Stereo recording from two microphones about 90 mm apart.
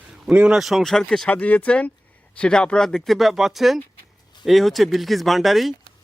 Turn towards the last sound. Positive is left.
turn(degrees=0)  # may be behind; listen again after turning